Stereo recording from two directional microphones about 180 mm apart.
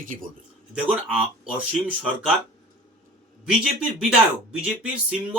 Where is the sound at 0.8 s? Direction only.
5° right (ahead or behind).